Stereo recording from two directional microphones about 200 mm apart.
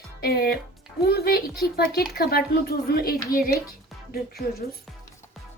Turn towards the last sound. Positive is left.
turn(degrees=50)  # may be behind; listen again after turning